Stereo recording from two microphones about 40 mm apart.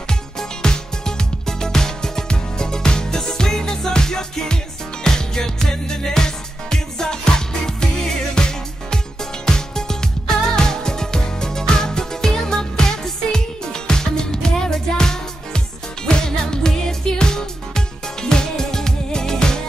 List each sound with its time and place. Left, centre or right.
0.1 s music: centre